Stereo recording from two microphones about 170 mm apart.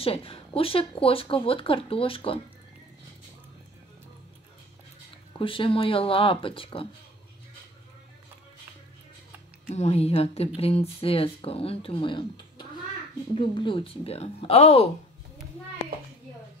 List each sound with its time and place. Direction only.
0.0 s speech: 35° left (ahead or behind)
5.4 s speech: 30° left (ahead or behind)
9.7 s speech: 40° left (ahead or behind)